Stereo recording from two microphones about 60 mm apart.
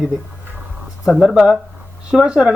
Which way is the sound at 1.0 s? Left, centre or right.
Centre.